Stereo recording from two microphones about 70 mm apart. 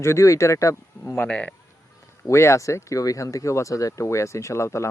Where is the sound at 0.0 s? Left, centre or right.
Left.